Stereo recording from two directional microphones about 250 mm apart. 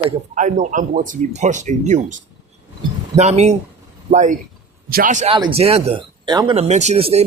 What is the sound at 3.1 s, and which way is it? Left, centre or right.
Speech, right.